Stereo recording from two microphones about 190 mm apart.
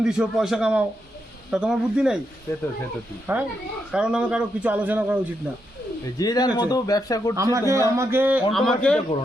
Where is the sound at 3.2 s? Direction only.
10° right (ahead or behind).